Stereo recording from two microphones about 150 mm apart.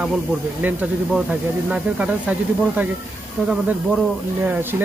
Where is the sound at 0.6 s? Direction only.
10° right (ahead or behind).